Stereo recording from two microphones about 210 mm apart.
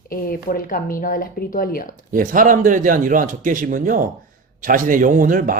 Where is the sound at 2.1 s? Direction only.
40° right (ahead or behind).